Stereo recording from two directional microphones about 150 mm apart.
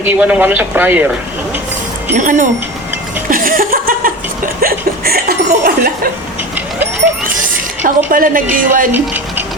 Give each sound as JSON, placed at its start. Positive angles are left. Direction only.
{"t": 0.0, "sound": "a man's voice", "side_deg": -10}
{"t": 2.1, "sound": "a woman's voice", "side_deg": -60}
{"t": 3.2, "sound": "a sound", "side_deg": -65}
{"t": 4.6, "sound": "chuckle", "side_deg": -90}
{"t": 5.5, "sound": "speech", "side_deg": -70}
{"t": 7.8, "sound": "a woman's voice", "side_deg": -65}
{"t": 8.9, "sound": "speech", "side_deg": -15}